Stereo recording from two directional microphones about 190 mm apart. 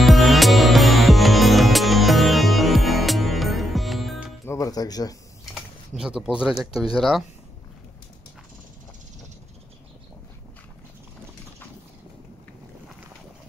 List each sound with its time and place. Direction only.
0.0 s music: centre (ahead or behind)
4.5 s music: 20° left (ahead or behind)
5.4 s speech: centre (ahead or behind)